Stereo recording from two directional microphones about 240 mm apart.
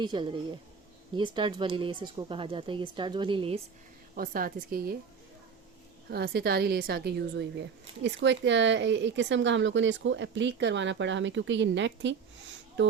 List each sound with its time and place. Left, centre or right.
0.0 s speech: centre
4.1 s a woman's voice: right
6.1 s speech: right